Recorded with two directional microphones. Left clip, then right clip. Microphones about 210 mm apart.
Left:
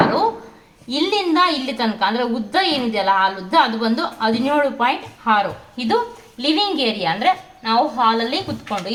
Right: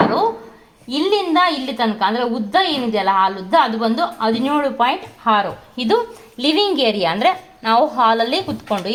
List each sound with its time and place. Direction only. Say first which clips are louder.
0.9 s a woman's voice: right 1 dB; 30° right (ahead or behind)